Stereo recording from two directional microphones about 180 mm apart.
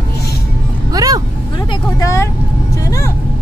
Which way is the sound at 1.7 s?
20° left (ahead or behind).